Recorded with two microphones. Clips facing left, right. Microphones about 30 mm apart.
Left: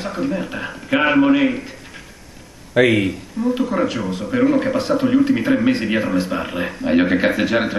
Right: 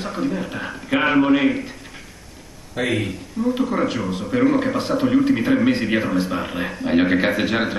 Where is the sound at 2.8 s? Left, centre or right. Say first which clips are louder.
Left 9 dB; left.